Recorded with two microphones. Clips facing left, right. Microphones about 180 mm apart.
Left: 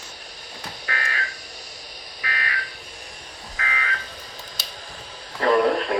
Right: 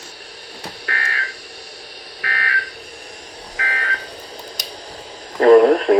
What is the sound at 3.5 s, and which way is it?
Buzzer, 45° right (ahead or behind).